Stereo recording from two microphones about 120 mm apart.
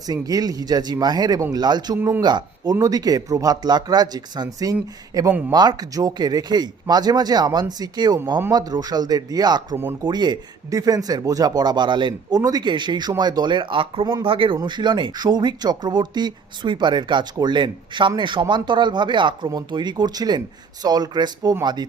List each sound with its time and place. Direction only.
0.1 s speech: 30° right (ahead or behind)